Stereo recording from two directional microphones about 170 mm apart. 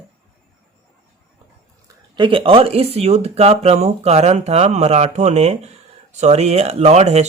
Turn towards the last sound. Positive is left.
turn(degrees=-40)  # may be behind; listen again after turning